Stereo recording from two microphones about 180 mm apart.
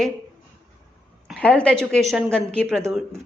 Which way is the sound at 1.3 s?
5° left (ahead or behind).